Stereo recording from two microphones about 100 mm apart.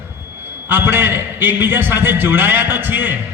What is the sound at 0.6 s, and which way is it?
A man's voice, 20° right (ahead or behind).